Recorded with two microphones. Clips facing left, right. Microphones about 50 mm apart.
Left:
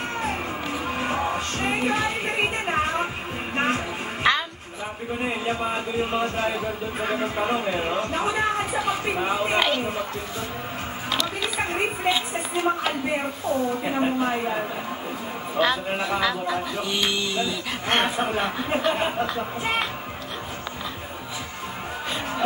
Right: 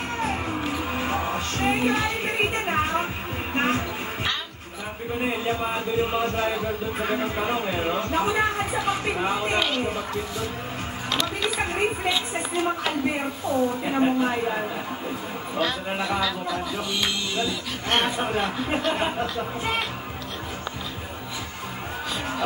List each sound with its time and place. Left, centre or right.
0.2 s music: centre
5.2 s speech: centre
11.4 s speech: centre
15.9 s speech: centre
17.4 s speech: left